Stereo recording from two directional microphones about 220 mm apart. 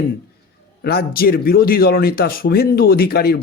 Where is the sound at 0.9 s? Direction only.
45° left (ahead or behind).